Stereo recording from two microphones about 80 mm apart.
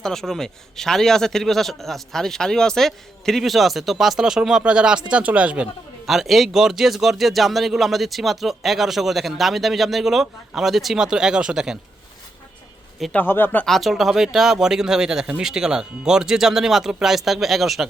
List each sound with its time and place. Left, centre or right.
0.0 s speech: centre
6.1 s speech: centre
13.1 s speech: left
13.7 s speech: centre